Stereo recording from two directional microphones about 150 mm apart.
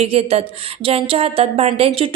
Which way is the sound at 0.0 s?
40° right (ahead or behind).